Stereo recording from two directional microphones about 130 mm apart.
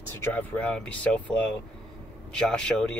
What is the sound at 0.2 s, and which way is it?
Speech, 10° left (ahead or behind).